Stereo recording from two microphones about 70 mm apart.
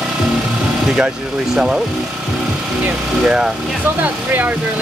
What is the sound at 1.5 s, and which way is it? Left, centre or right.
Speech, centre.